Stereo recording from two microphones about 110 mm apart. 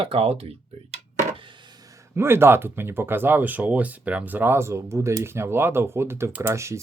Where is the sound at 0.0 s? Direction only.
60° right (ahead or behind).